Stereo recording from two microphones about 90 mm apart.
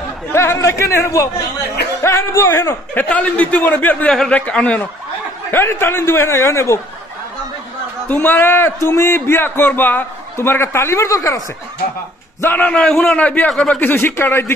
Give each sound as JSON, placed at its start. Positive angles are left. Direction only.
{"t": 0.3, "sound": "a man's voice", "side_deg": 30}
{"t": 5.5, "sound": "a man's voice", "side_deg": 25}
{"t": 8.1, "sound": "a man's voice", "side_deg": 20}
{"t": 12.4, "sound": "a man's voice", "side_deg": 25}
{"t": 12.6, "sound": "a man's voice", "side_deg": 10}
{"t": 13.7, "sound": "a man's voice", "side_deg": 20}